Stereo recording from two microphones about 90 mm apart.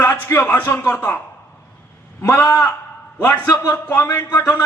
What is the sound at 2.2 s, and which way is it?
A man's voice, 25° left (ahead or behind).